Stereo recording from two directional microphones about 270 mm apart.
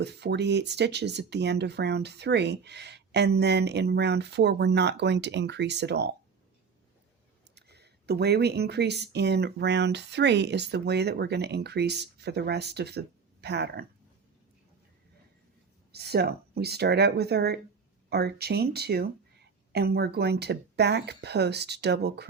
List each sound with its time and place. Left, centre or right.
0.0 s speech: right
7.5 s speech: right
15.9 s speech: right